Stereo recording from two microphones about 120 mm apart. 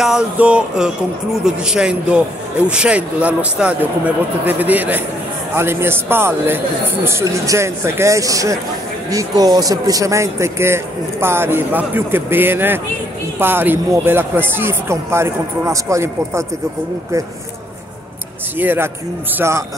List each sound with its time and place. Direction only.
0.0 s speech: 5° right (ahead or behind); by 16.4 s 25° right (ahead or behind)
18.6 s speech: 15° right (ahead or behind)